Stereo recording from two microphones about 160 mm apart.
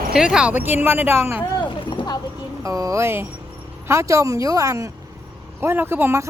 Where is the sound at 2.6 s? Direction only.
20° right (ahead or behind).